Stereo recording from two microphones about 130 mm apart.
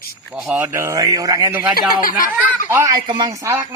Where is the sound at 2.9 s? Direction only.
35° right (ahead or behind).